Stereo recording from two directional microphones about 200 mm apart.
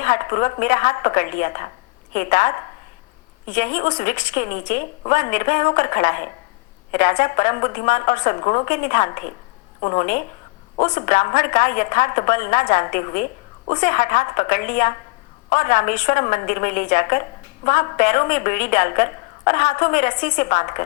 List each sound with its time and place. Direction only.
0.0 s a woman's voice: 40° left (ahead or behind)